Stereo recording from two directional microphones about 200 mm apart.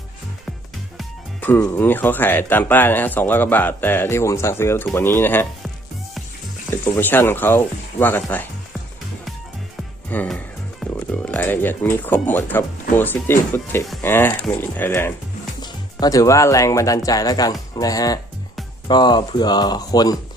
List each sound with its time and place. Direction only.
0.9 s speech: 10° left (ahead or behind)
6.7 s speech: 10° left (ahead or behind)
10.1 s music: 5° left (ahead or behind)
11.3 s speech: 10° left (ahead or behind)